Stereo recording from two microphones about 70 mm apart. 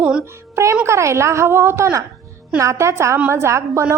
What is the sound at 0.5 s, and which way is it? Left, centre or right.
A woman's voice, right.